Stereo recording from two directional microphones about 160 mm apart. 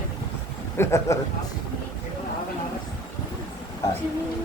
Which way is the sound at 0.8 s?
15° left (ahead or behind).